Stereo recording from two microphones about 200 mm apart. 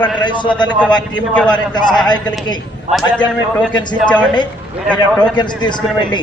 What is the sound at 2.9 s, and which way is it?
Speech, 35° right (ahead or behind).